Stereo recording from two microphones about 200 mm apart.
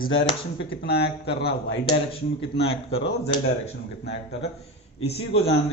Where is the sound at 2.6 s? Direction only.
30° left (ahead or behind).